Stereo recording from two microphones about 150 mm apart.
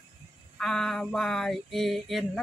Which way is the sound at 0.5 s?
5° left (ahead or behind).